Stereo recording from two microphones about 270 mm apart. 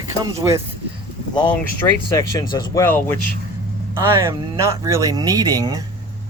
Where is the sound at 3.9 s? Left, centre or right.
Centre.